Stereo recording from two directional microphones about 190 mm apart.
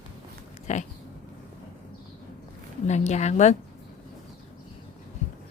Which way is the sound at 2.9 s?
35° left (ahead or behind).